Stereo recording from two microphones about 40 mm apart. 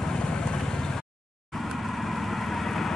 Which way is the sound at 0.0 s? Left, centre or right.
Centre.